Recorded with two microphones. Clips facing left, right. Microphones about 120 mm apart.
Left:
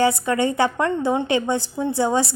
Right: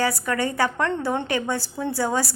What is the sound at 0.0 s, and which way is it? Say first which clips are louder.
A woman's voice: left 5 dB; 20° left (ahead or behind).